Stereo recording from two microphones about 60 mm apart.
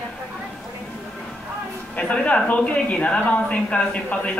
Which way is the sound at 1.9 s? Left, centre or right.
Left.